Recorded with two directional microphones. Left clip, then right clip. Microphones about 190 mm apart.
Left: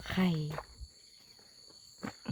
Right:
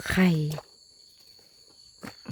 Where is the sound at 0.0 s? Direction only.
45° right (ahead or behind).